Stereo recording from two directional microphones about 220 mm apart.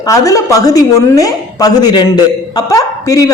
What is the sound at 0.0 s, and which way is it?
A woman's voice, 15° left (ahead or behind).